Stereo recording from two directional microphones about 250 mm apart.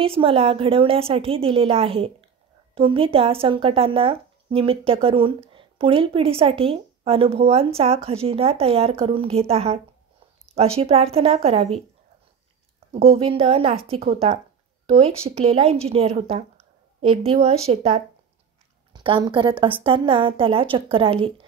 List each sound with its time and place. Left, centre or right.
0.0 s speech: right
12.9 s speech: right